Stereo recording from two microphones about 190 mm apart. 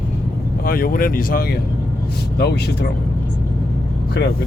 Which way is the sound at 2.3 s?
60° left (ahead or behind).